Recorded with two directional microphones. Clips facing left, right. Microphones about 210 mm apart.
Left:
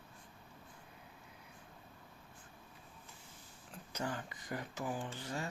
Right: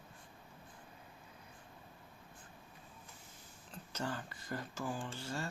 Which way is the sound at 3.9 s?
15° left (ahead or behind).